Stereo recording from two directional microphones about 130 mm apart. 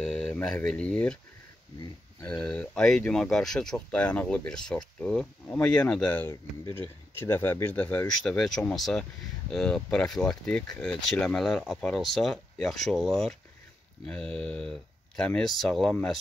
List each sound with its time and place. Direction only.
0.0 s speech: 5° left (ahead or behind)
2.4 s speech: 5° left (ahead or behind)